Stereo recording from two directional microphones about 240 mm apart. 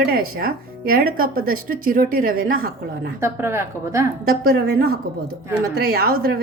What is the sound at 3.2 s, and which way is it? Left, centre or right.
Speech, centre.